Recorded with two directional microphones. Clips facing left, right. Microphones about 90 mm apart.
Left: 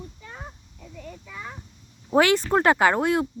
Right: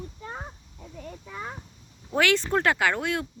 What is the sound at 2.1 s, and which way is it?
Speech, 25° left (ahead or behind).